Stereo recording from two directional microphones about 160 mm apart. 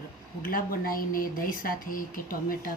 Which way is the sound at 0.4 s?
65° left (ahead or behind).